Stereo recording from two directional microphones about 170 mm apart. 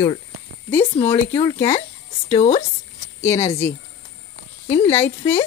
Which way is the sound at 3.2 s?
15° left (ahead or behind).